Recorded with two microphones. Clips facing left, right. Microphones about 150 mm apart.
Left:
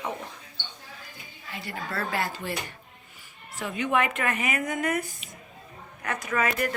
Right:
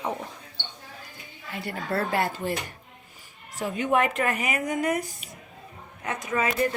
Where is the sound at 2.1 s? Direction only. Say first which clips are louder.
Right 4 dB; 55° right (ahead or behind).